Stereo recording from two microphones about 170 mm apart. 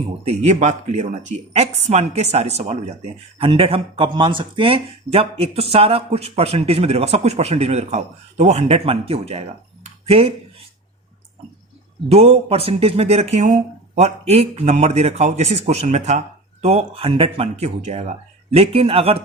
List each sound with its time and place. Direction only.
0.3 s speech: 45° right (ahead or behind)
9.8 s a sound: 35° right (ahead or behind)
12.0 s speech: 35° right (ahead or behind)